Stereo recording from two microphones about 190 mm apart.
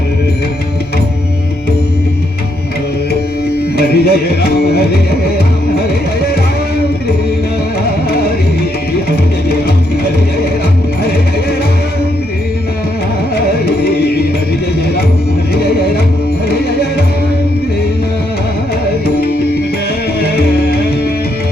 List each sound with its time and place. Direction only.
3.8 s music: 55° left (ahead or behind)